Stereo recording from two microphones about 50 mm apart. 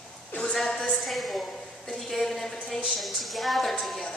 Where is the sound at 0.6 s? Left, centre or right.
Centre.